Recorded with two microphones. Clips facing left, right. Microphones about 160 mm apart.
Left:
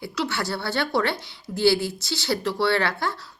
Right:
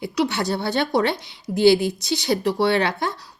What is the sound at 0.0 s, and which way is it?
A woman's voice, 20° right (ahead or behind).